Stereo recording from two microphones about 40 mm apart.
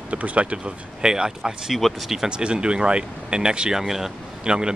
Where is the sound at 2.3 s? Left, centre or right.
Right.